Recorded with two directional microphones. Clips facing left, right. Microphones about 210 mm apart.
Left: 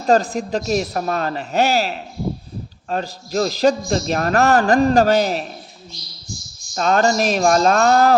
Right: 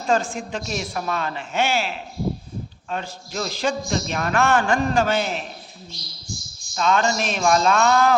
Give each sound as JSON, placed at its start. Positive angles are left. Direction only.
{"t": 0.1, "sound": "a man's voice", "side_deg": 40}
{"t": 6.7, "sound": "a man's voice", "side_deg": 40}